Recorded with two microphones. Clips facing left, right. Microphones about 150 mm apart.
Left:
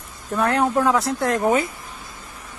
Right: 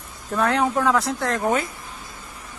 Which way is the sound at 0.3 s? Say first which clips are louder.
Left 1 dB; 10° left (ahead or behind).